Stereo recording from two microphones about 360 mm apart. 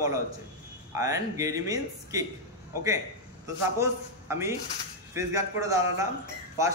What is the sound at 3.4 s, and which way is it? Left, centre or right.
Speech, centre.